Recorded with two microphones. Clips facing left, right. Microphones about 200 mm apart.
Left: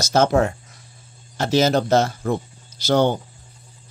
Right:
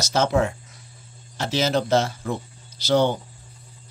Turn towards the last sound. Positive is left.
turn(degrees=45)  # may be behind; listen again after turning